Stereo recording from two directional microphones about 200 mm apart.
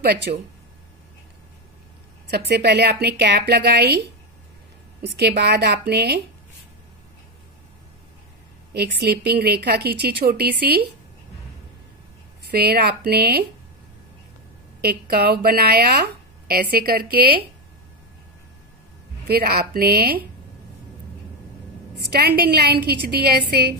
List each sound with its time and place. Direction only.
0.0 s speech: 50° right (ahead or behind)
2.3 s a woman's voice: 55° right (ahead or behind)
5.1 s a woman's voice: 55° right (ahead or behind)
8.7 s speech: 55° right (ahead or behind)
12.4 s speech: 50° right (ahead or behind)
14.8 s speech: 55° right (ahead or behind)
19.2 s speech: 50° right (ahead or behind)
22.1 s speech: 50° right (ahead or behind)